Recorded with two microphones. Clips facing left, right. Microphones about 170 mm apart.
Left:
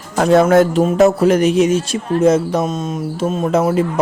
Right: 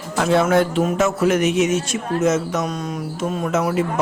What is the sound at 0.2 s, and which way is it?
Speech, 40° left (ahead or behind).